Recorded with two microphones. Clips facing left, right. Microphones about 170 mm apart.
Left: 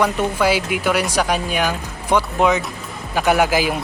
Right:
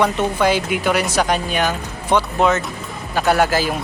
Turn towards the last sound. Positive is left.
turn(degrees=15)  # may be behind; listen again after turning